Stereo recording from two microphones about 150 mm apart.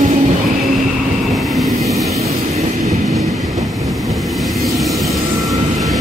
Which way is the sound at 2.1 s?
45° right (ahead or behind).